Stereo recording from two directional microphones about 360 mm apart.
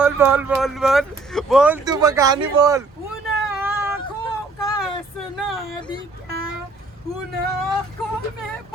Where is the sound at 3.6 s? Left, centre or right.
Centre.